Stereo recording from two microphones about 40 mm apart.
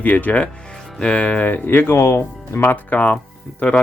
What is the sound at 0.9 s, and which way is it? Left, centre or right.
Speech, left.